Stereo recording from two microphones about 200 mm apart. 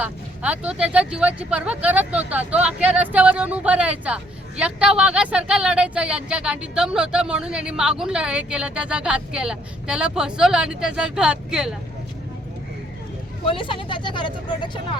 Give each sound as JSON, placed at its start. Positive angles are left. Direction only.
{"t": 0.0, "sound": "speech", "side_deg": -5}
{"t": 13.4, "sound": "speech", "side_deg": 25}